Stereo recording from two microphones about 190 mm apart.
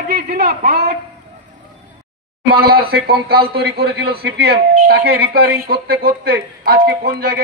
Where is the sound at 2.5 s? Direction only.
55° right (ahead or behind).